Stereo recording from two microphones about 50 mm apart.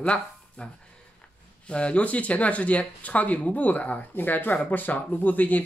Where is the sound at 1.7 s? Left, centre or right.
Left.